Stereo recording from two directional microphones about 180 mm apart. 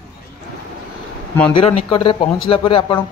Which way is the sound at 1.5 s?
30° left (ahead or behind).